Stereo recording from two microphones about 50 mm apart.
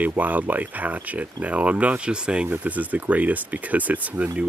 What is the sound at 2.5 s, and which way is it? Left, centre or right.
Speech, right.